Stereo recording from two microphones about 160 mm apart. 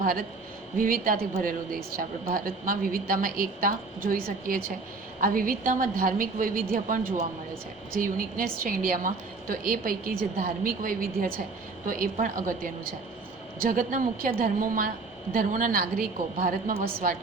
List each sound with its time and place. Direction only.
0.0 s a man's voice: 65° right (ahead or behind)